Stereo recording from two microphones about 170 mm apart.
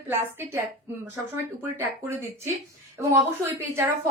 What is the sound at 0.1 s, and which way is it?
Speech, 15° right (ahead or behind).